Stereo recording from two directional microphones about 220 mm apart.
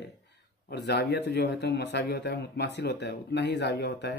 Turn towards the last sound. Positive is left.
turn(degrees=50)  # may be behind; listen again after turning